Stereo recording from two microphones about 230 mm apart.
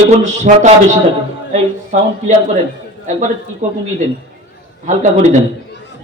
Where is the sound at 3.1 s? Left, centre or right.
Right.